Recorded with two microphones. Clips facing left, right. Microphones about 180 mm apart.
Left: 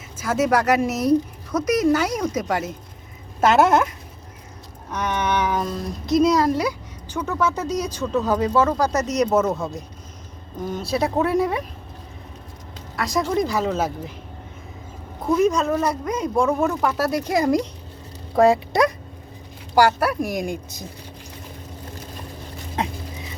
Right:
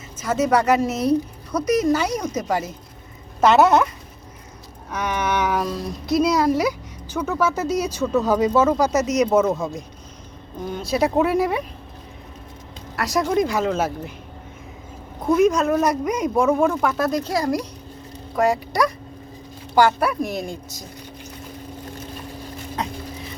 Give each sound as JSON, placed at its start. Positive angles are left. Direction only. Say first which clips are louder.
{"t": 0.2, "sound": "speech", "louder": "right 1 dB", "side_deg": 5}
{"t": 4.9, "sound": "speech", "louder": "even", "side_deg": -5}
{"t": 10.9, "sound": "speech", "louder": "right 2 dB", "side_deg": -5}
{"t": 13.0, "sound": "speech", "louder": "right 2 dB", "side_deg": 0}
{"t": 15.3, "sound": "speech", "louder": "right 2 dB", "side_deg": 0}
{"t": 15.8, "sound": "speech", "louder": "right 3 dB", "side_deg": -15}
{"t": 18.3, "sound": "speech", "louder": "left 4 dB", "side_deg": 30}
{"t": 19.7, "sound": "speech", "louder": "even", "side_deg": 5}